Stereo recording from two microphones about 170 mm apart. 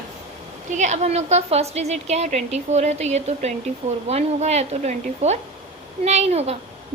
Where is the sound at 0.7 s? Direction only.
45° right (ahead or behind).